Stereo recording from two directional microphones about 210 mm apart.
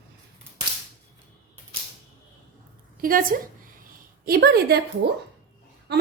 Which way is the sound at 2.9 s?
40° right (ahead or behind).